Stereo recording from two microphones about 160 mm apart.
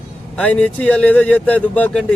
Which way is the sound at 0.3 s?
5° left (ahead or behind).